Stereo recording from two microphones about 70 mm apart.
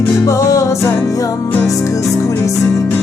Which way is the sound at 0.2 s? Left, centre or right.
Left.